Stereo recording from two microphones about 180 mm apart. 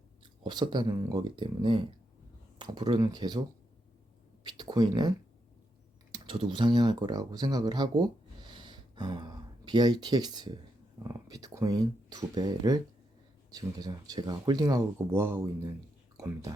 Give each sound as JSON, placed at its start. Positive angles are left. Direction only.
{"t": 0.2, "sound": "speech", "side_deg": -25}
{"t": 4.4, "sound": "speech", "side_deg": -25}